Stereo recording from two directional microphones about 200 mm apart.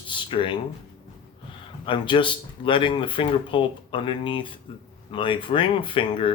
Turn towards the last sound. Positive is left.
turn(degrees=25)  # may be behind; listen again after turning